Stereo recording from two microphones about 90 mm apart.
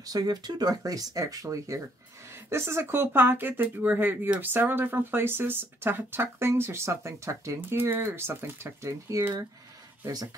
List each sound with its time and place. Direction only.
0.0 s speech: 45° right (ahead or behind); by 9.5 s 30° right (ahead or behind)